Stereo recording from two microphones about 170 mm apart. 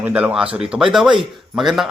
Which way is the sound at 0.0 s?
10° right (ahead or behind).